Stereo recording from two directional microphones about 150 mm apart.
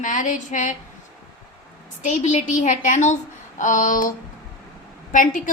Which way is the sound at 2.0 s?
55° left (ahead or behind).